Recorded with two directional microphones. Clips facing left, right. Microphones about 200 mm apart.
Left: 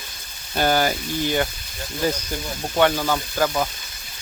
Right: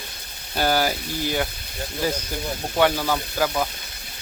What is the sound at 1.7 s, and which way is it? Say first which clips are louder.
Speech: even; 60° right (ahead or behind).